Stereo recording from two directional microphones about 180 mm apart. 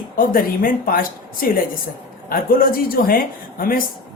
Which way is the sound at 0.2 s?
50° left (ahead or behind).